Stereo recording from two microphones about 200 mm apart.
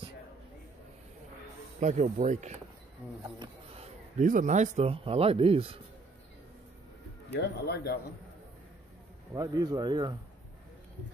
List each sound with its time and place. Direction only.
1.8 s speech: 40° right (ahead or behind)
4.2 s speech: 40° right (ahead or behind)
7.2 s speech: 55° left (ahead or behind)
9.3 s speech: 20° right (ahead or behind)